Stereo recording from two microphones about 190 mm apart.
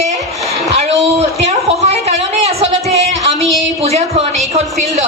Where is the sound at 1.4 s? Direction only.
35° right (ahead or behind).